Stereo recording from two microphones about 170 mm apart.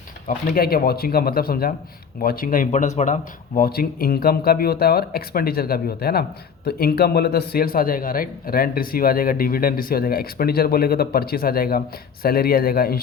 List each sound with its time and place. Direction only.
0.3 s a man's voice: 55° left (ahead or behind)